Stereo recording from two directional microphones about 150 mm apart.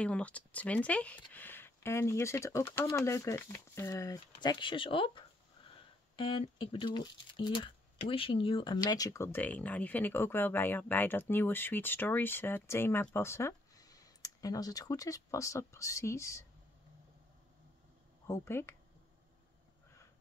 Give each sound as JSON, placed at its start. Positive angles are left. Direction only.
{"t": 0.0, "sound": "speech", "side_deg": 10}
{"t": 18.2, "sound": "speech", "side_deg": 20}